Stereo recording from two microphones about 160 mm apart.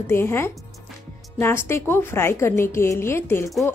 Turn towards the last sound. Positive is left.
turn(degrees=15)  # may be behind; listen again after turning